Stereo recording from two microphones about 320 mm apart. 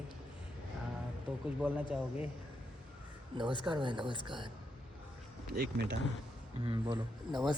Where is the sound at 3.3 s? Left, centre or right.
Centre.